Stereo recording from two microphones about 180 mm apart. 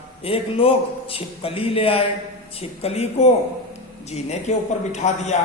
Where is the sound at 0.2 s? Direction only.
30° left (ahead or behind).